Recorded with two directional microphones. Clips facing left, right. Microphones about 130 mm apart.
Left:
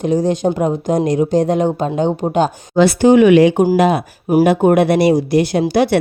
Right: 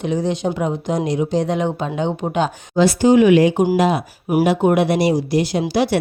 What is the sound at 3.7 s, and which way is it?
Speech, 60° left (ahead or behind).